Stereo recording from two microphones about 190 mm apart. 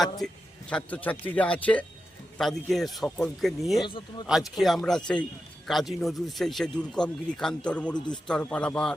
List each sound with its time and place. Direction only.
0.7 s speech: 10° left (ahead or behind)
3.8 s speech: 25° left (ahead or behind)
4.3 s speech: centre (ahead or behind)